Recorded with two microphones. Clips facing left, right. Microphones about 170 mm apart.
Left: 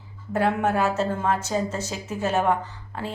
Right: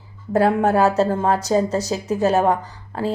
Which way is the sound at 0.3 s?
35° right (ahead or behind).